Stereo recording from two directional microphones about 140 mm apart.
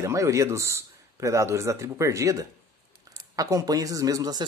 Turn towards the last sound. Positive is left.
turn(degrees=-25)  # may be behind; listen again after turning